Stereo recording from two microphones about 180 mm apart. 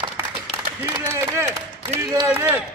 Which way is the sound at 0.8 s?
15° right (ahead or behind).